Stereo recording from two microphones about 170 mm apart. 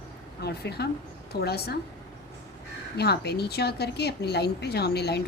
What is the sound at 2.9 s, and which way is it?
A woman's voice, 75° left (ahead or behind).